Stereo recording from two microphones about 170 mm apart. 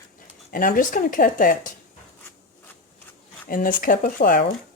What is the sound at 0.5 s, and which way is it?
Speech, 55° left (ahead or behind).